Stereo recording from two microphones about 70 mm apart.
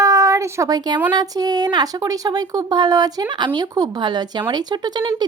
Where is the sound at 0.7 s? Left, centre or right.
Right.